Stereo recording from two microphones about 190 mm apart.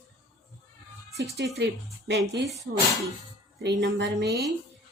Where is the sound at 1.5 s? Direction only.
65° right (ahead or behind).